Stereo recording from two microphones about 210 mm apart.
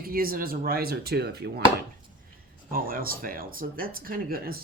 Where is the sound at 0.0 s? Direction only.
45° right (ahead or behind).